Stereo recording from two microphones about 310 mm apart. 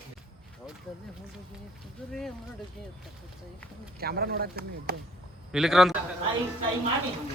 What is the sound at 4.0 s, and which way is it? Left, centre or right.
Speech, right.